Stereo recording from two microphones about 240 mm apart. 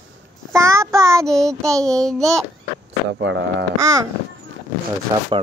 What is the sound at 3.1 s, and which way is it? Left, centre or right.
Speech, right.